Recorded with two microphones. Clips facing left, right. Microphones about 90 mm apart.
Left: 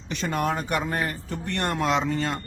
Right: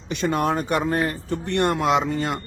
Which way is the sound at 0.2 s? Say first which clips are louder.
Right 4 dB; 25° right (ahead or behind).